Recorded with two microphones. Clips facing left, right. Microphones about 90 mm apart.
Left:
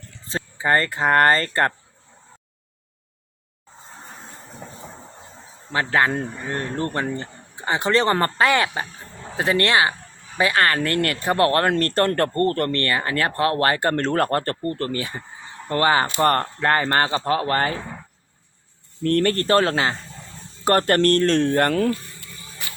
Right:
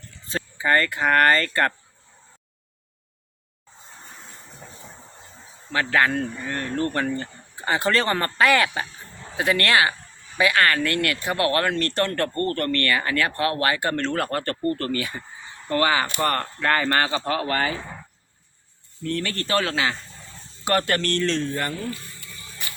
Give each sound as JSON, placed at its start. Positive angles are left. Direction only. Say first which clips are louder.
{"t": 0.3, "sound": "speech", "louder": "left 1 dB", "side_deg": 25}
{"t": 5.7, "sound": "speech", "louder": "left 1 dB", "side_deg": 25}
{"t": 14.5, "sound": "speech", "louder": "right 1 dB", "side_deg": 25}
{"t": 19.0, "sound": "speech", "louder": "left 8 dB", "side_deg": 50}